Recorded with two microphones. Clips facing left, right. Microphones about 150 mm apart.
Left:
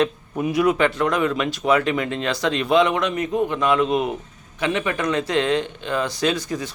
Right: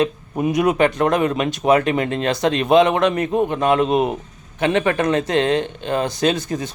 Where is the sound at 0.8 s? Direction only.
45° right (ahead or behind).